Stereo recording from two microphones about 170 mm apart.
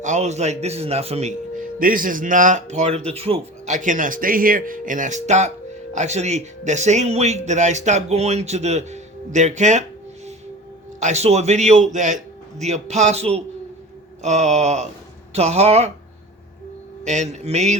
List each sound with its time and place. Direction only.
0.0 s a man's voice: 45° right (ahead or behind)
3.8 s a man's voice: 50° right (ahead or behind)
11.0 s a man's voice: 40° right (ahead or behind)
17.0 s a man's voice: 45° right (ahead or behind)